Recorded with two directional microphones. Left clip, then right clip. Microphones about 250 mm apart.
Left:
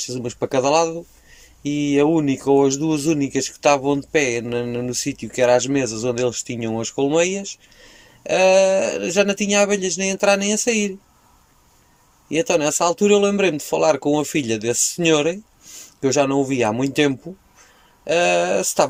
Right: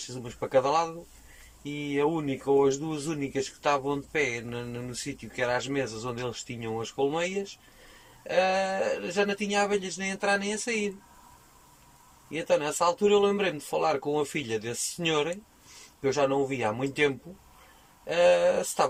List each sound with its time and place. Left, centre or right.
0.0 s speech: left
12.3 s speech: left